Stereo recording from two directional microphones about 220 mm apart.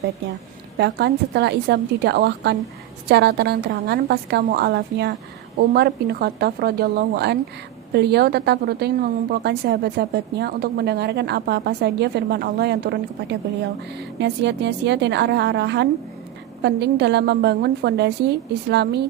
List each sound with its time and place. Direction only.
0.8 s a woman's voice: 50° right (ahead or behind)